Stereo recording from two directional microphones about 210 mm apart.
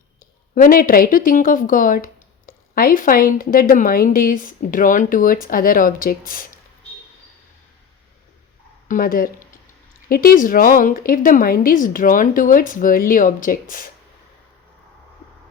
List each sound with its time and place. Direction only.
0.5 s a woman's voice: 40° left (ahead or behind)
8.9 s a woman's voice: 40° left (ahead or behind)